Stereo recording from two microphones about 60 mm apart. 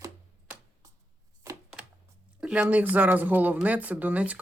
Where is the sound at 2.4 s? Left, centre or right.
Centre.